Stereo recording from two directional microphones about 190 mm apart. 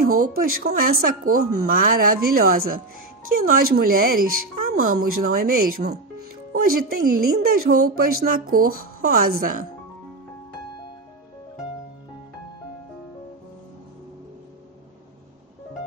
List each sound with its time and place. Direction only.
0.0 s speech: 45° right (ahead or behind)